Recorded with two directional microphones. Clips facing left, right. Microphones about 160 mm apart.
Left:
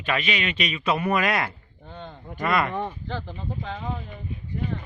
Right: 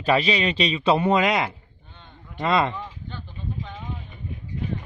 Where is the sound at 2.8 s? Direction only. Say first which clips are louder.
Left 7 dB; 75° left (ahead or behind); by 4.0 s 90° left.